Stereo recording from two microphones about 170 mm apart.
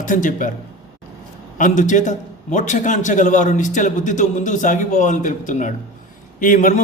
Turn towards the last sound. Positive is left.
turn(degrees=50)  # may be behind; listen again after turning